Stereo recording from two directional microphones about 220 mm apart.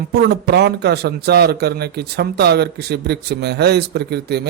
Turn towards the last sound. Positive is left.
turn(degrees=-50)  # may be behind; listen again after turning